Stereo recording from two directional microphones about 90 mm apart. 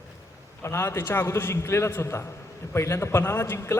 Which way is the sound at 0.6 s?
30° left (ahead or behind).